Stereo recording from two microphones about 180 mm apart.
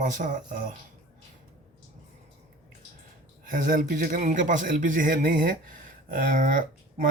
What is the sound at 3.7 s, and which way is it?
Speech, 45° right (ahead or behind).